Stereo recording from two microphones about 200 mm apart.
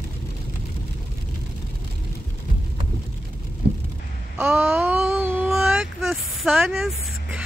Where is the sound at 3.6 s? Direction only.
55° right (ahead or behind).